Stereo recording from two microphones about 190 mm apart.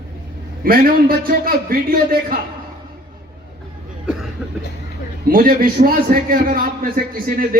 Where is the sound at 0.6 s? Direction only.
50° right (ahead or behind).